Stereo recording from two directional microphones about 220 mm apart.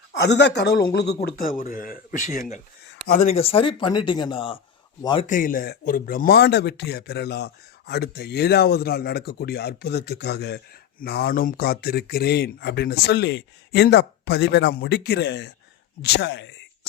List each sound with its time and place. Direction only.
0.2 s speech: 50° left (ahead or behind); by 4.6 s 25° left (ahead or behind)
5.2 s speech: 35° left (ahead or behind)